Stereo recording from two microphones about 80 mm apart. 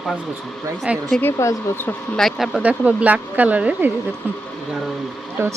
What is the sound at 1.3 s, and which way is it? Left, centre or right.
Speech, left.